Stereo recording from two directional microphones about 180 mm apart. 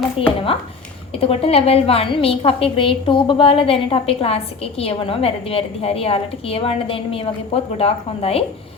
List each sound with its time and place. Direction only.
0.2 s a woman's voice: 30° left (ahead or behind)